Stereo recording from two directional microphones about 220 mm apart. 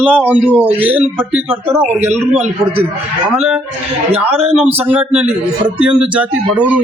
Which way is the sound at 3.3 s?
Centre (ahead or behind).